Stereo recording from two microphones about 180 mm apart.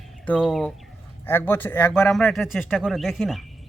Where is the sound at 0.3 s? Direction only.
Centre (ahead or behind).